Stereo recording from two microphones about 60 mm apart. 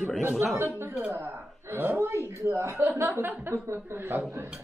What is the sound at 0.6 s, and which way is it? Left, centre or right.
Speech, right.